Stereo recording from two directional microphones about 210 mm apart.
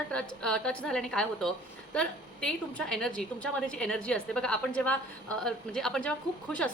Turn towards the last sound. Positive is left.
turn(degrees=5)  # may be behind; listen again after turning